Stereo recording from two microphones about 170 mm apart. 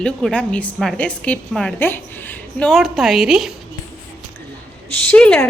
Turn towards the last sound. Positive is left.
turn(degrees=5)  # may be behind; listen again after turning